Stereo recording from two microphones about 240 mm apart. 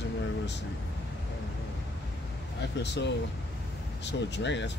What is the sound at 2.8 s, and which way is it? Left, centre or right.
Speech, left.